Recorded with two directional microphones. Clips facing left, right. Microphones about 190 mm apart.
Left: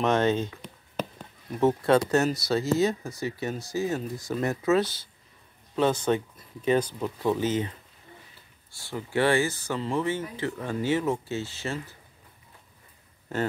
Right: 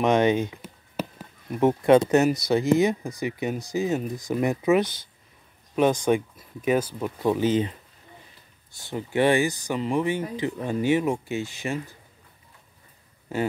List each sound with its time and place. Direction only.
0.0 s speech: 15° right (ahead or behind)
8.7 s speech: 20° right (ahead or behind)
13.3 s speech: 10° right (ahead or behind)